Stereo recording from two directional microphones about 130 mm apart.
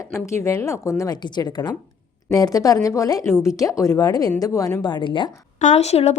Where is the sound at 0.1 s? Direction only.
20° left (ahead or behind); by 5.3 s 35° left (ahead or behind).